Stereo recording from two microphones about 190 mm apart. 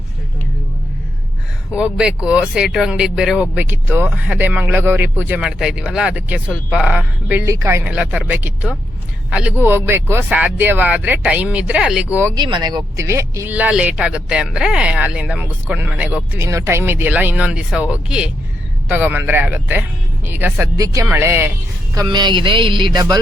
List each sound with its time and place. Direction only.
1.7 s speech: 5° right (ahead or behind)
12.1 s speech: 15° right (ahead or behind)
21.9 s speech: 20° right (ahead or behind)